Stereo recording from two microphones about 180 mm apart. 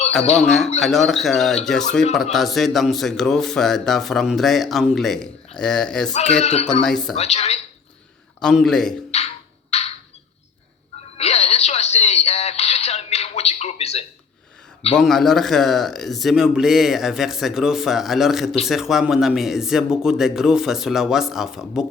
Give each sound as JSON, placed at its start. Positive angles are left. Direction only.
{"t": 0.2, "sound": "a woman's voice", "side_deg": 35}
{"t": 0.8, "sound": "a man's voice", "side_deg": 0}
{"t": 6.4, "sound": "a woman's voice", "side_deg": 35}
{"t": 6.8, "sound": "a man's voice", "side_deg": 0}
{"t": 7.2, "sound": "a woman's voice", "side_deg": 35}
{"t": 8.4, "sound": "a man's voice", "side_deg": 0}
{"t": 9.1, "sound": "music", "side_deg": 35}
{"t": 11.2, "sound": "a sound", "side_deg": 35}
{"t": 14.9, "sound": "a man's voice", "side_deg": 0}